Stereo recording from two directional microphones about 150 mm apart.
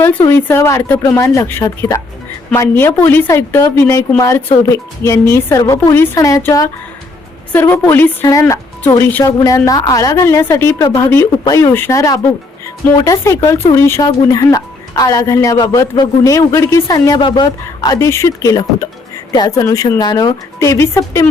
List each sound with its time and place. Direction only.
0.3 s speech: 15° left (ahead or behind)
10.8 s speech: 30° left (ahead or behind)
11.4 s speech: 20° left (ahead or behind)